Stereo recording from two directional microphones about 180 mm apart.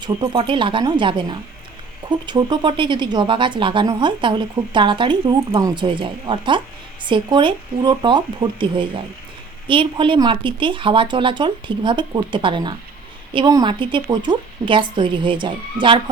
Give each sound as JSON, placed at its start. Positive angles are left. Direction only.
{"t": 0.0, "sound": "speech", "side_deg": -25}